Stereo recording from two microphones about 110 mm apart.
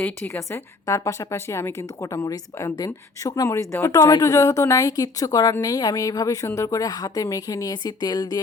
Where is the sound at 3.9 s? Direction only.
40° left (ahead or behind).